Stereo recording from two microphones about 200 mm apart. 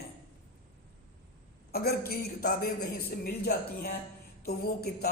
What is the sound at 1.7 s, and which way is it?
Speech, 50° left (ahead or behind).